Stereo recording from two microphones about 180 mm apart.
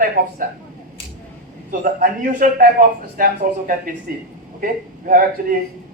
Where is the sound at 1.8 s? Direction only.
50° right (ahead or behind).